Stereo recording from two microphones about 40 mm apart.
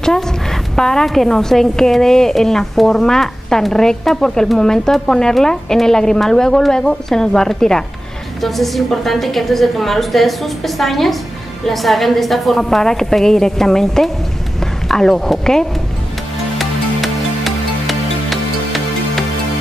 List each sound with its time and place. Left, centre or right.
0.7 s a woman's voice: centre
8.4 s a woman's voice: centre
16.5 s music: centre